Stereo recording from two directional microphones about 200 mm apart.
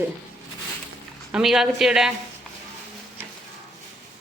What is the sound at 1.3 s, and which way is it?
Speech, centre (ahead or behind).